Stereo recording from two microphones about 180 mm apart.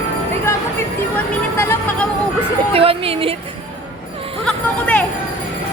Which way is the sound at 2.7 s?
30° right (ahead or behind).